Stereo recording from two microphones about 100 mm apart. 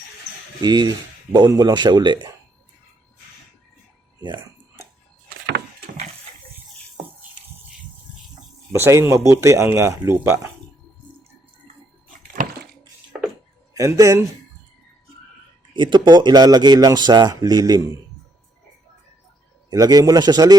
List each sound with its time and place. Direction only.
0.6 s speech: 45° right (ahead or behind)
8.7 s a man's voice: 25° right (ahead or behind)
13.7 s a man's voice: 35° right (ahead or behind)
15.7 s speech: 50° right (ahead or behind)
19.7 s a man's voice: 40° right (ahead or behind)